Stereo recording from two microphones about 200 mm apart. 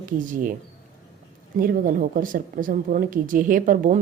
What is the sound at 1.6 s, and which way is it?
Speech, 45° right (ahead or behind).